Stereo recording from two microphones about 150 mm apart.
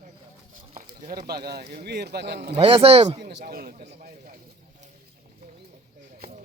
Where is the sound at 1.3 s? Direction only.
90° right.